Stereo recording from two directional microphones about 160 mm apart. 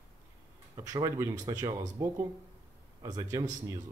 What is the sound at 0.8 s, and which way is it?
A man's voice, 25° right (ahead or behind).